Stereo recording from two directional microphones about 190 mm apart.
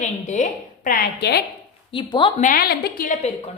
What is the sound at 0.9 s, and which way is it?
Speech, 55° left (ahead or behind).